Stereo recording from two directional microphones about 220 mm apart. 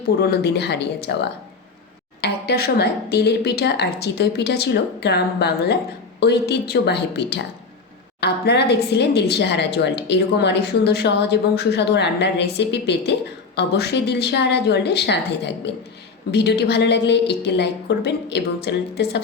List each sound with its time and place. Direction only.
0.0 s a woman's voice: 45° left (ahead or behind)